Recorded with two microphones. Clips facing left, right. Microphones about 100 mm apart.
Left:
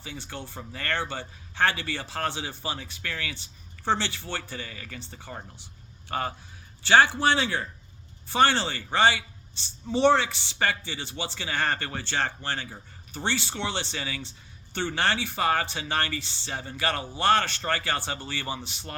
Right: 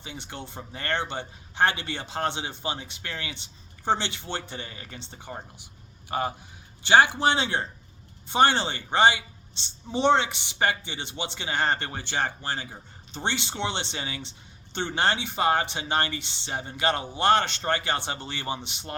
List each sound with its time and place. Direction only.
0.0 s a man's voice: 20° right (ahead or behind)